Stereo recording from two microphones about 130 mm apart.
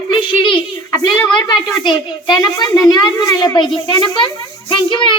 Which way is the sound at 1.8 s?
35° left (ahead or behind).